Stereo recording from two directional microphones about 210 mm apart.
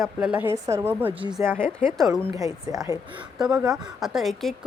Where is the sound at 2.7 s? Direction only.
15° right (ahead or behind).